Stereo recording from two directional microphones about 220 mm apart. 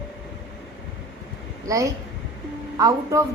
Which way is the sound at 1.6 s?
15° right (ahead or behind).